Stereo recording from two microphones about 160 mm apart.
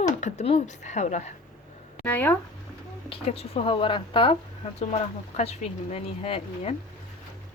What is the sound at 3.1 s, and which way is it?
Speech, 40° left (ahead or behind).